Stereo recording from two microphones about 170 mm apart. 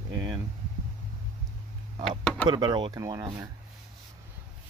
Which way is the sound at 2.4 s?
25° right (ahead or behind).